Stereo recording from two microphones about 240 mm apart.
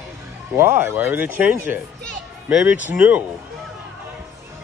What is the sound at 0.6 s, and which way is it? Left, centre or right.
A man's voice, centre.